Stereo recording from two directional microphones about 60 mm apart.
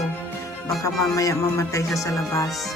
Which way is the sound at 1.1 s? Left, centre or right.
Left.